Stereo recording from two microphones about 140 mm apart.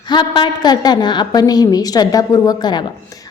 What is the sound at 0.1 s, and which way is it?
A woman's voice, 35° left (ahead or behind).